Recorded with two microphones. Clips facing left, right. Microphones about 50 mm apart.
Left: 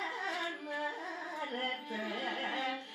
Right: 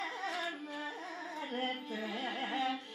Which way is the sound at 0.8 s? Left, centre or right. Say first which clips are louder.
Left 3 dB; centre.